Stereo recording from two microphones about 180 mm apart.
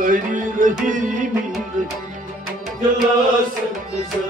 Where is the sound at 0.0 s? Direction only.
45° right (ahead or behind).